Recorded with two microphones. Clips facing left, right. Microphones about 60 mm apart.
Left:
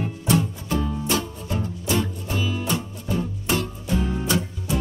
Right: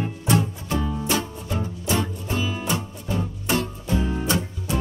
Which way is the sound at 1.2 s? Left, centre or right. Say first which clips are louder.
Even; centre.